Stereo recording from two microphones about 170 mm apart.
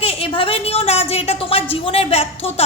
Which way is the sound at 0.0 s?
35° left (ahead or behind).